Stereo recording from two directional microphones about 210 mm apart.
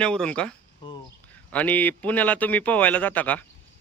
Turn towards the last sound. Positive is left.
turn(degrees=10)  # may be behind; listen again after turning